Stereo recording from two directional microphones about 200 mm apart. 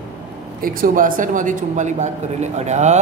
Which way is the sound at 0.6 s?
45° right (ahead or behind).